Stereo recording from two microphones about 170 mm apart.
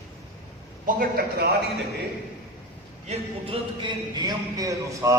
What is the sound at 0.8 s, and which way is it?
Speech, 60° right (ahead or behind).